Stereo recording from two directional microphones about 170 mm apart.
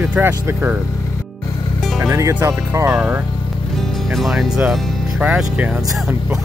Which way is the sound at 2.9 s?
5° right (ahead or behind).